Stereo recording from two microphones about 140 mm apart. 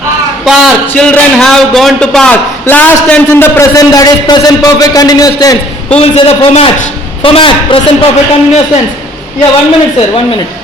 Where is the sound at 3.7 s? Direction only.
25° left (ahead or behind).